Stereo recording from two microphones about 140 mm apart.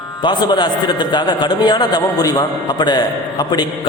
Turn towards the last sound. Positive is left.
turn(degrees=30)  # may be behind; listen again after turning